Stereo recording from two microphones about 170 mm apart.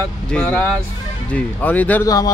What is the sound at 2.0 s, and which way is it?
Speech, 20° left (ahead or behind).